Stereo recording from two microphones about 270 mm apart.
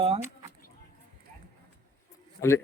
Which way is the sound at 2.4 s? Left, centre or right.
Centre.